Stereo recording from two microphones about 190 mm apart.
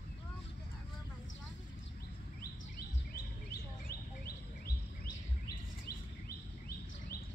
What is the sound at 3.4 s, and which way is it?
Bird, 55° left (ahead or behind).